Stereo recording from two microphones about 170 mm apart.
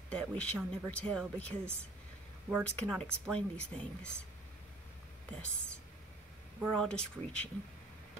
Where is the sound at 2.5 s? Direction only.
10° right (ahead or behind).